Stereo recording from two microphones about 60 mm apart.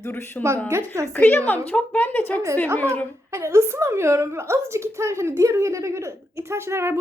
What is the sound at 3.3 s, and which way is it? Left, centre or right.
A woman's voice, right.